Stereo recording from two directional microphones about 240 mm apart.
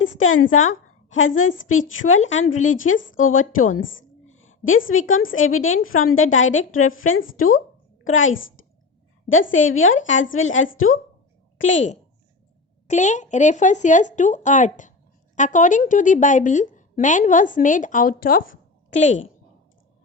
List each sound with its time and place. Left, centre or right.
0.2 s a woman's voice: left
2.2 s speech: left
2.5 s a woman's voice: left
12.9 s a woman's voice: left
19.0 s a woman's voice: left